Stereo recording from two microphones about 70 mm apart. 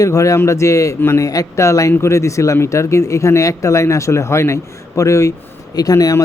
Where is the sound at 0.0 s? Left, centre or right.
Left.